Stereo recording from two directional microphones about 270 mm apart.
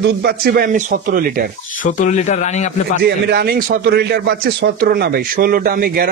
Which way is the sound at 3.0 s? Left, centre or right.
Right.